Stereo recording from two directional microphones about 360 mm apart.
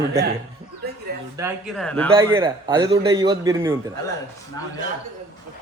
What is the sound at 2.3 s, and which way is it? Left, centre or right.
A man's voice, centre.